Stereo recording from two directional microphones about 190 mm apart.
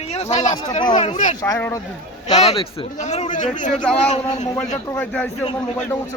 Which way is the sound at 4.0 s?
35° left (ahead or behind).